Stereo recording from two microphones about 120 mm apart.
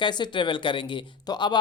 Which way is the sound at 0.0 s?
40° left (ahead or behind).